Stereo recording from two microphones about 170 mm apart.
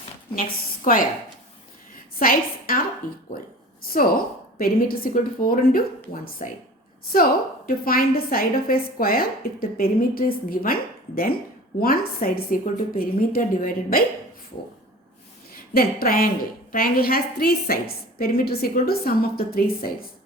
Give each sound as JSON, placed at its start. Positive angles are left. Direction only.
{"t": 0.3, "sound": "a woman's voice", "side_deg": 55}
{"t": 2.1, "sound": "a woman's voice", "side_deg": 55}
{"t": 3.8, "sound": "a woman's voice", "side_deg": 60}
{"t": 7.9, "sound": "a woman's voice", "side_deg": 60}
{"t": 15.7, "sound": "a woman's voice", "side_deg": 60}